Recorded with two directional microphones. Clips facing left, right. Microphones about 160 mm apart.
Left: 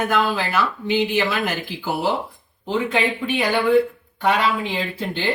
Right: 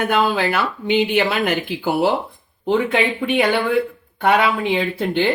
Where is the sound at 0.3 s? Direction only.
60° right (ahead or behind).